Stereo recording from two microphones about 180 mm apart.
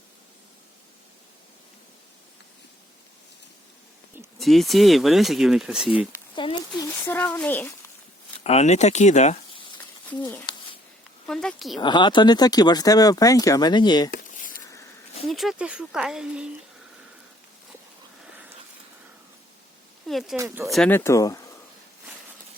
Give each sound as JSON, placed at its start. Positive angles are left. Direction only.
{"t": 4.4, "sound": "speech", "side_deg": 0}
{"t": 6.3, "sound": "speech", "side_deg": 25}
{"t": 7.0, "sound": "speech", "side_deg": 10}
{"t": 8.4, "sound": "speech", "side_deg": 40}
{"t": 10.1, "sound": "speech", "side_deg": 10}
{"t": 11.8, "sound": "speech", "side_deg": 25}
{"t": 14.1, "sound": "a sound", "side_deg": 50}
{"t": 15.3, "sound": "speech", "side_deg": 0}
{"t": 20.1, "sound": "speech", "side_deg": 0}
{"t": 20.3, "sound": "speech", "side_deg": -15}
{"t": 20.7, "sound": "speech", "side_deg": 0}
{"t": 20.9, "sound": "speech", "side_deg": 15}